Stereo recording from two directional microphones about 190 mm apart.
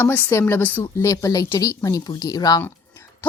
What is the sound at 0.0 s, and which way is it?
A woman's voice, 15° left (ahead or behind).